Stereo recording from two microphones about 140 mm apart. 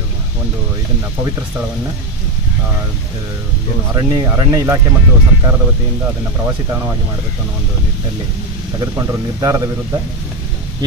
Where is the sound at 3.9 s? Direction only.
25° right (ahead or behind).